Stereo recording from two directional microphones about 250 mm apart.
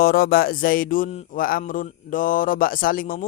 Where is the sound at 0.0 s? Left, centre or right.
Left.